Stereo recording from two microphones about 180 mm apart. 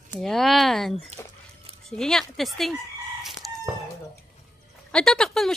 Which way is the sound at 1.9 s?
5° left (ahead or behind).